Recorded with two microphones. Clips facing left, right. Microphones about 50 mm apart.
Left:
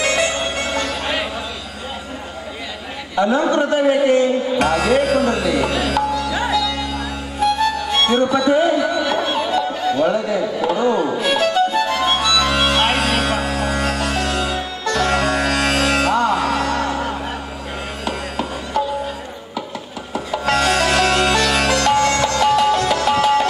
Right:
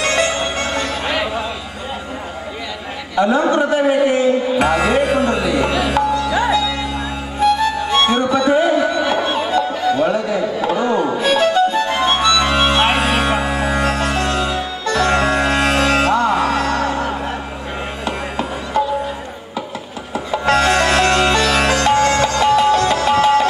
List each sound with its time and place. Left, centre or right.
0.0 s music: centre
3.2 s a sound: centre
9.7 s music: centre
20.2 s music: centre